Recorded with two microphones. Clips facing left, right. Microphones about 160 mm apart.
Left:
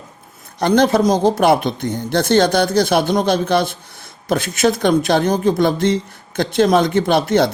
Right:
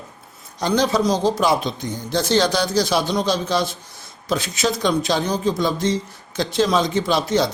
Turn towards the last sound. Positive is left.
turn(degrees=55)  # may be behind; listen again after turning